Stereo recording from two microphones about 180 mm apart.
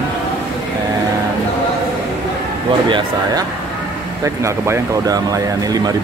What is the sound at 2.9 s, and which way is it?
Speech, 20° right (ahead or behind).